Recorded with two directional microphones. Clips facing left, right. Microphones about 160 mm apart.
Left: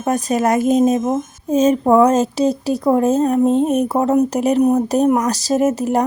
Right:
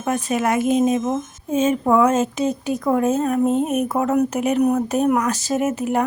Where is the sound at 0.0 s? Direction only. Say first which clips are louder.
Left 4 dB; 40° left (ahead or behind).